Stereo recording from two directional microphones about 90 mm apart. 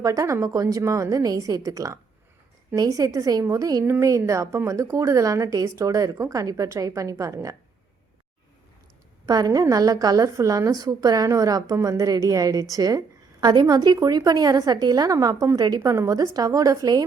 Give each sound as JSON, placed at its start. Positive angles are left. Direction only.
{"t": 0.0, "sound": "speech", "side_deg": -40}
{"t": 9.2, "sound": "a woman's voice", "side_deg": -45}
{"t": 15.8, "sound": "speech", "side_deg": -35}